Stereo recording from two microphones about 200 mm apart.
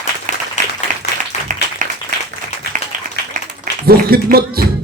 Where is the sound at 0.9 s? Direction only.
40° right (ahead or behind).